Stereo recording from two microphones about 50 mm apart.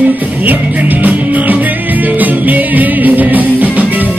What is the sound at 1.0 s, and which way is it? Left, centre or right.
Music, right.